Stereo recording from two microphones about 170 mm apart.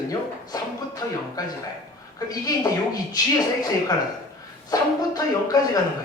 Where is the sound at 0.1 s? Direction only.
20° left (ahead or behind).